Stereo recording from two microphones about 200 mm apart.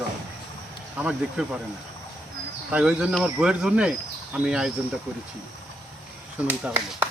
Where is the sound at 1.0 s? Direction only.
5° right (ahead or behind).